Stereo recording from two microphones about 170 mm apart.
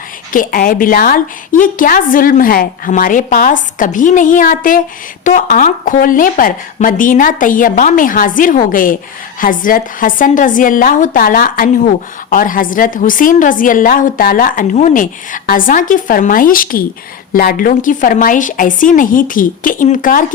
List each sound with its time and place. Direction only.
0.3 s a woman's voice: 55° left (ahead or behind)